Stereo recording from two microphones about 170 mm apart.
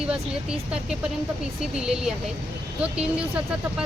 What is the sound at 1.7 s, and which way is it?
Speech, 5° right (ahead or behind).